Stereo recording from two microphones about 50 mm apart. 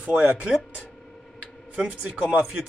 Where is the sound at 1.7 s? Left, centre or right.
Right.